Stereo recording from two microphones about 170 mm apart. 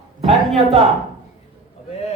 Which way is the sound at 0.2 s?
35° right (ahead or behind).